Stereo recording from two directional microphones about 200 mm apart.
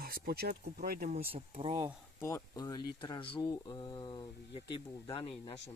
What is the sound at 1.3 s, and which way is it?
Speech, 30° right (ahead or behind).